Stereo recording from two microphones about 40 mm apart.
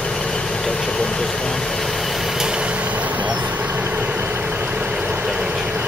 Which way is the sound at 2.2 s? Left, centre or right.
Centre.